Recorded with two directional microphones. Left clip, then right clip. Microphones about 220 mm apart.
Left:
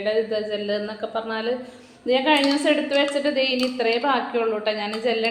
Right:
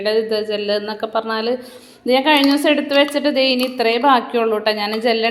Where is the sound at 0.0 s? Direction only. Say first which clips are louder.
Right 5 dB; 50° right (ahead or behind).